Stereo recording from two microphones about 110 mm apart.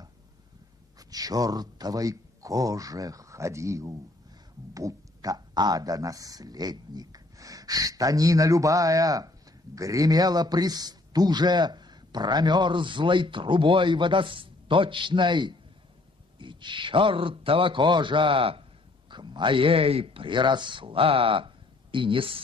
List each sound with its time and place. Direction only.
0.9 s a man's voice: 35° right (ahead or behind); by 18.6 s 55° right (ahead or behind)
19.0 s a man's voice: 45° right (ahead or behind)